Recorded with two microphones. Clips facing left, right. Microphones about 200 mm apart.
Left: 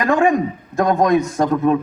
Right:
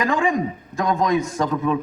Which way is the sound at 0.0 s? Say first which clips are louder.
Left 5 dB; 60° left (ahead or behind).